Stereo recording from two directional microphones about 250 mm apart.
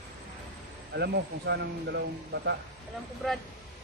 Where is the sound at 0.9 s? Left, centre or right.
Right.